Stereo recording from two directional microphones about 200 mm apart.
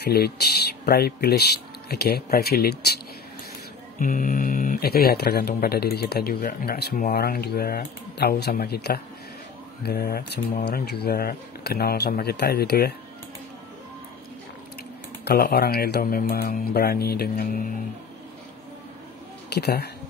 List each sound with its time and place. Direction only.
0.0 s speech: 50° left (ahead or behind)
4.0 s speech: 40° left (ahead or behind)
15.2 s speech: 50° left (ahead or behind)
19.5 s speech: 55° left (ahead or behind)